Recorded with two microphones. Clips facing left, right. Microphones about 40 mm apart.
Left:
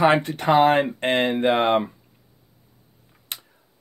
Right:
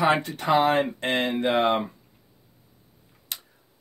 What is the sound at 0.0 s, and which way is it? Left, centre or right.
Speech, left.